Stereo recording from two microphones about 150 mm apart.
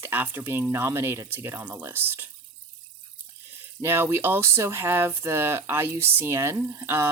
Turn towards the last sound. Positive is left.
turn(degrees=-15)  # may be behind; listen again after turning